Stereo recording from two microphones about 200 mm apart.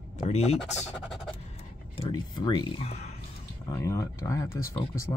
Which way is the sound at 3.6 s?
15° left (ahead or behind).